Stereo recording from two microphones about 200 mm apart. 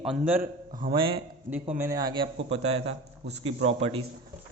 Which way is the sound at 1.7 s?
15° right (ahead or behind).